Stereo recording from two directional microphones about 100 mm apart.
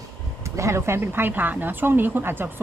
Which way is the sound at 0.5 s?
30° right (ahead or behind).